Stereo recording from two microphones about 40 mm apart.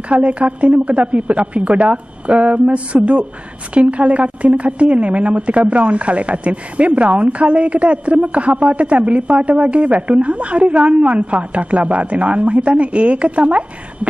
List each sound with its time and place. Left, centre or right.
0.1 s a woman's voice: right